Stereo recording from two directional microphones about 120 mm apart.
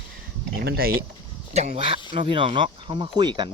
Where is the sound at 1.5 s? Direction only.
65° right (ahead or behind).